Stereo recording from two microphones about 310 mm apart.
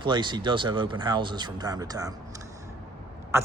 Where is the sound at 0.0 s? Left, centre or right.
Centre.